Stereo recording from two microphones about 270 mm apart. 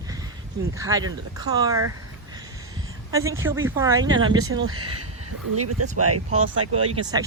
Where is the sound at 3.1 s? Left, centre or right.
Centre.